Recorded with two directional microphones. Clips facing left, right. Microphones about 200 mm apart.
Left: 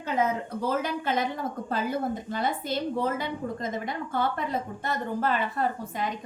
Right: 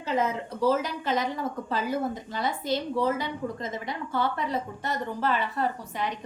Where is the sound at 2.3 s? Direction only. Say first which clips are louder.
Right 2 dB; 50° left (ahead or behind).